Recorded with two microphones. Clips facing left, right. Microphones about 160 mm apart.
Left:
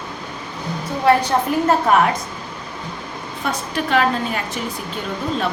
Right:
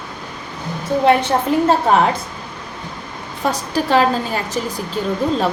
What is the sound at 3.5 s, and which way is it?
Speech, 35° right (ahead or behind).